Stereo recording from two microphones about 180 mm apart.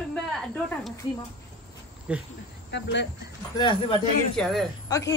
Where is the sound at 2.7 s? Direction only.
75° left (ahead or behind).